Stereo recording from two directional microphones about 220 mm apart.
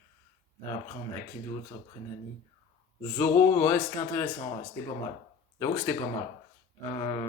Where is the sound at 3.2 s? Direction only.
10° left (ahead or behind).